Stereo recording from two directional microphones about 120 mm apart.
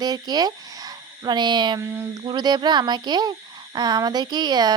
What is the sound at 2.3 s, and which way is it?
A woman's voice, 35° right (ahead or behind).